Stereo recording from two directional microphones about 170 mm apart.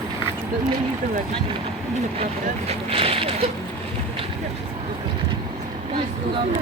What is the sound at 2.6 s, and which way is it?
Speech, 35° right (ahead or behind).